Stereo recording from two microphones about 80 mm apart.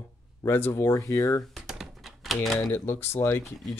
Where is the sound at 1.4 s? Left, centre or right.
Centre.